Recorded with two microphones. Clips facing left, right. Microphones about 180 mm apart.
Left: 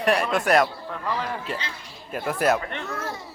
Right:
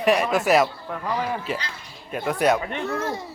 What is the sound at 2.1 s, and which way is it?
Speech, centre (ahead or behind).